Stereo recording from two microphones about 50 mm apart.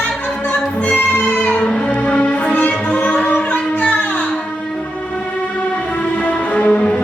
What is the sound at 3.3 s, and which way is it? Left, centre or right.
Music, left.